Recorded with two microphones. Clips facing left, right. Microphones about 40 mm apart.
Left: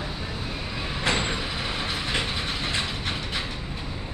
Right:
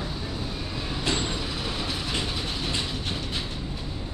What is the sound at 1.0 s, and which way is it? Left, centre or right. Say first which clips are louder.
Vehicle: left 3 dB; left.